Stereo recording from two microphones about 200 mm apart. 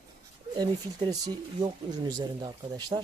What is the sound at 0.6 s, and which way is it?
Speech, 20° right (ahead or behind).